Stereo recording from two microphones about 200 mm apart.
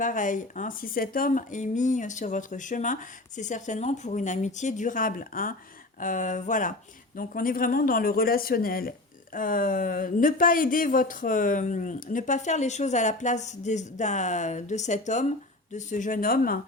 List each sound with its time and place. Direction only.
0.0 s speech: 40° left (ahead or behind)